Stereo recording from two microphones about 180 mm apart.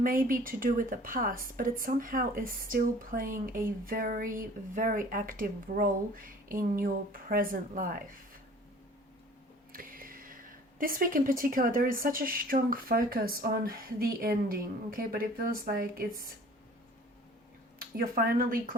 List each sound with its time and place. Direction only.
0.0 s speech: 50° right (ahead or behind)
9.7 s a woman's voice: 50° right (ahead or behind)
17.7 s speech: 55° right (ahead or behind)